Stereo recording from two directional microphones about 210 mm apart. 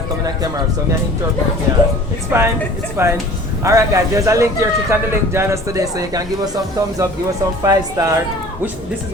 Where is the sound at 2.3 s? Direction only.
10° right (ahead or behind).